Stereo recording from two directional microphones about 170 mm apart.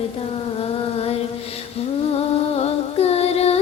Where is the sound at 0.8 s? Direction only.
35° left (ahead or behind).